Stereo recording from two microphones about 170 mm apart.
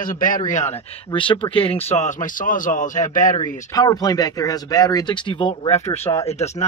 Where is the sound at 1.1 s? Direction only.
30° left (ahead or behind); by 3.3 s 50° left (ahead or behind).